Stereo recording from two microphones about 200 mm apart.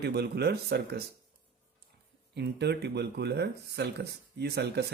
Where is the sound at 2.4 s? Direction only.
55° right (ahead or behind).